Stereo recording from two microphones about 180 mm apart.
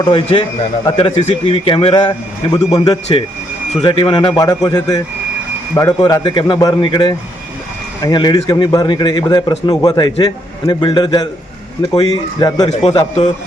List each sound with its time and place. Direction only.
0.0 s a man's voice: 25° left (ahead or behind)
3.7 s a man's voice: 30° left (ahead or behind)